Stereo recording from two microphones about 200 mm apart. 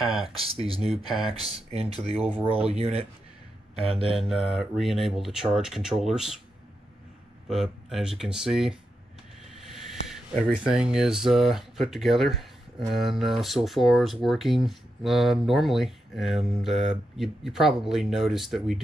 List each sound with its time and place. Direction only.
0.6 s speech: 30° right (ahead or behind)
4.2 s speech: centre (ahead or behind)
7.4 s speech: centre (ahead or behind)